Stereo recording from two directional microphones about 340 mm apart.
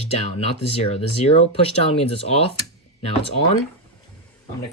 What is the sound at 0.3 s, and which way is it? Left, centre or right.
Speech, centre.